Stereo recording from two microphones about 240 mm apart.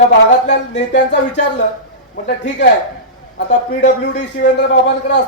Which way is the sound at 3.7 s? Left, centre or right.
Left.